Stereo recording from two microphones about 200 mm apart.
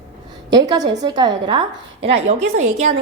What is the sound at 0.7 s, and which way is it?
Speech, 20° right (ahead or behind).